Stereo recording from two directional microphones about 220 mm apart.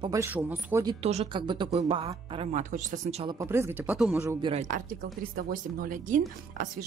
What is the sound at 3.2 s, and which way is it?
Speech, 15° right (ahead or behind).